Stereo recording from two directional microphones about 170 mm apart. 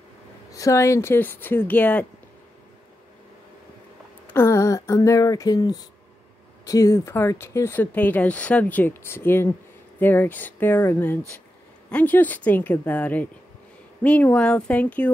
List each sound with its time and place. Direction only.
0.5 s speech: 20° left (ahead or behind)
4.3 s speech: 15° left (ahead or behind)